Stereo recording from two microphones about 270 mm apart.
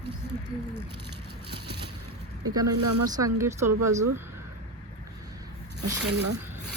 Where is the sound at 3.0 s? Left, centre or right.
Centre.